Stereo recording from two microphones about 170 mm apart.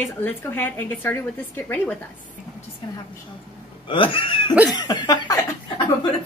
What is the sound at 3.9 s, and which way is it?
Speech, 30° left (ahead or behind).